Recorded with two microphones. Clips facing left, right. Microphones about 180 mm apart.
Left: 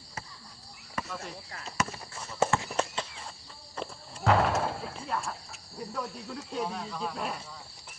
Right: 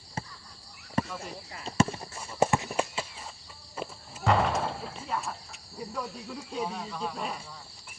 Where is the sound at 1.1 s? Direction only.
10° right (ahead or behind).